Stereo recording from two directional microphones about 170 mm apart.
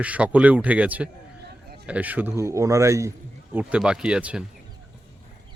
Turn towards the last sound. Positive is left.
turn(degrees=-5)  # may be behind; listen again after turning